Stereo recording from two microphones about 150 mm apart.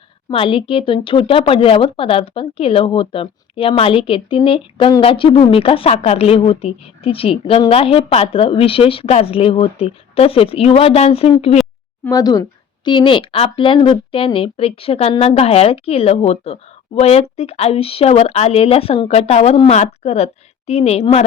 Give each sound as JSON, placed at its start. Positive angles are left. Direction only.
{"t": 0.3, "sound": "a woman's voice", "side_deg": 35}
{"t": 12.1, "sound": "a woman's voice", "side_deg": 25}